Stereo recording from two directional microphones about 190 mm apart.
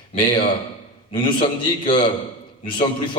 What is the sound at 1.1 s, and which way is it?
A man's voice, 25° left (ahead or behind).